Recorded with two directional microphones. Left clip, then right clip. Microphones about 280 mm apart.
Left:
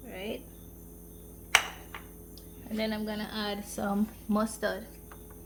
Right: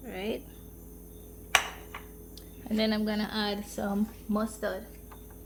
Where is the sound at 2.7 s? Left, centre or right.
Right; by 3.9 s centre.